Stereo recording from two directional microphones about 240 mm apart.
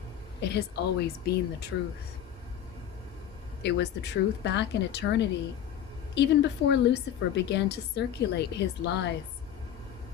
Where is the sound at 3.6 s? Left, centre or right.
Left.